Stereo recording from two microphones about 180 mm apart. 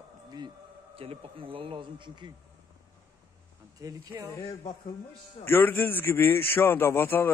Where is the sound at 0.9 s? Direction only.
30° right (ahead or behind).